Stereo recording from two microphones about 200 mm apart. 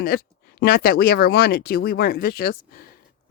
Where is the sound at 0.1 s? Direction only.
50° left (ahead or behind).